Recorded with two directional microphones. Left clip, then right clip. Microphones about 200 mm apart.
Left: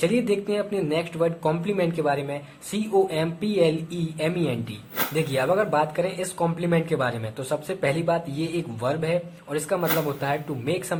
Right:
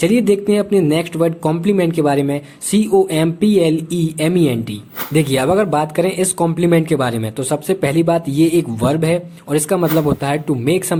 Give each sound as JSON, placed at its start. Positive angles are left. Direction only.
{"t": 0.0, "sound": "speech", "side_deg": -40}